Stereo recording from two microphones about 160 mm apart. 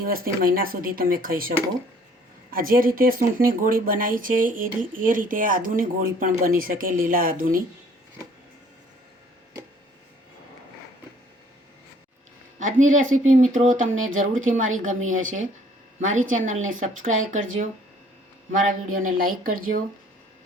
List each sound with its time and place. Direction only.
0.0 s speech: 65° right (ahead or behind)
12.5 s speech: 55° right (ahead or behind)